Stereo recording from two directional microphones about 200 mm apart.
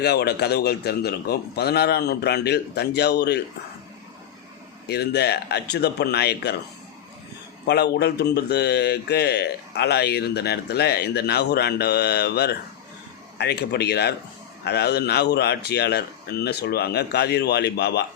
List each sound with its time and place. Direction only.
0.0 s a man's voice: 55° left (ahead or behind)
4.9 s speech: 55° left (ahead or behind)
7.7 s speech: 55° left (ahead or behind)